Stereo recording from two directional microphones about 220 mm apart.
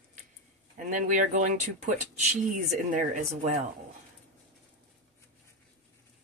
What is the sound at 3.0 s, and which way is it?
Speech, 35° right (ahead or behind).